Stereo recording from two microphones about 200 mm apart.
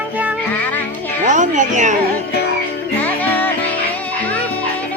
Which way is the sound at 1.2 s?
40° right (ahead or behind).